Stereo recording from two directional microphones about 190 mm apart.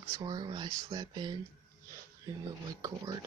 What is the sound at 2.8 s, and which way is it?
Speech, 20° right (ahead or behind).